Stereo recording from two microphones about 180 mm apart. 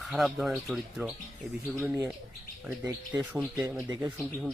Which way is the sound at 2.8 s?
15° right (ahead or behind).